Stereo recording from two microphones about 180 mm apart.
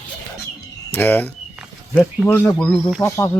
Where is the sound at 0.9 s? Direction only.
10° left (ahead or behind).